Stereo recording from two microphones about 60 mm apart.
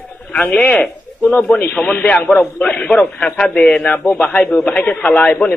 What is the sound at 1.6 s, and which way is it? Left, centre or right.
Speech, left.